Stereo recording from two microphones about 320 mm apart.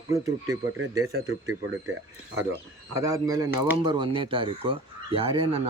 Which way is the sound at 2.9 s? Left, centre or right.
Centre.